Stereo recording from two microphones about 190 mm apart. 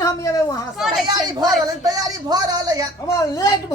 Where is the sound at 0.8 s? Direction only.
Centre (ahead or behind).